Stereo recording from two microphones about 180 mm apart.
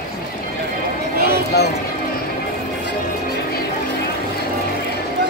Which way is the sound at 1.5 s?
65° left (ahead or behind).